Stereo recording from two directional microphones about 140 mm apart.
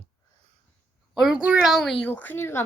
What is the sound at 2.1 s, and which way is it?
Speech, 15° left (ahead or behind).